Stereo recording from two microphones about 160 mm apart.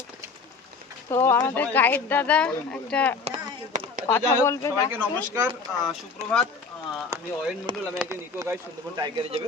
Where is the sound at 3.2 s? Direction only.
50° right (ahead or behind).